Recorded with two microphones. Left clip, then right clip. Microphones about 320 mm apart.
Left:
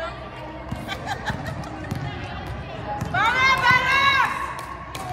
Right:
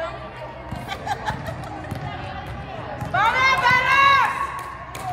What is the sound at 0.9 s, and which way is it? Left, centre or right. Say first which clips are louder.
Snicker: right 2 dB; right.